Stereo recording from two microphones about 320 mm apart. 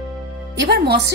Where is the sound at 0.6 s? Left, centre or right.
Right.